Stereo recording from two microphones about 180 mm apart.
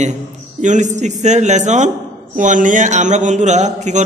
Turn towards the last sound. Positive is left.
turn(degrees=-40)  # may be behind; listen again after turning